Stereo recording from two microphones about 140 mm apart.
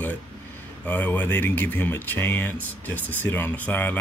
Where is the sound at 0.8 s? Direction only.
10° left (ahead or behind).